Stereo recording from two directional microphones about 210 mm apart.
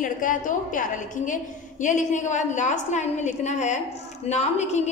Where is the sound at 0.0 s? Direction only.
40° left (ahead or behind).